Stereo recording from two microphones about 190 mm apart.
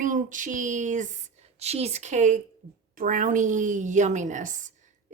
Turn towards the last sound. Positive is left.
turn(degrees=-40)  # may be behind; listen again after turning